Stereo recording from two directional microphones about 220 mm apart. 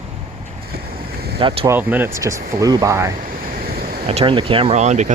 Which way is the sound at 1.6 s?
10° right (ahead or behind).